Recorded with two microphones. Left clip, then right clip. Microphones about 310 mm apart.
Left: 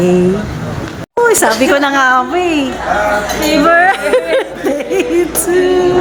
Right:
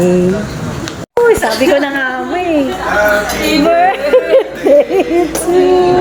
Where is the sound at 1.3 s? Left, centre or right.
Centre.